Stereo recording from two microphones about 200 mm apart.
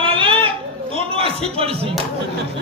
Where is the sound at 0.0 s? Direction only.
25° right (ahead or behind).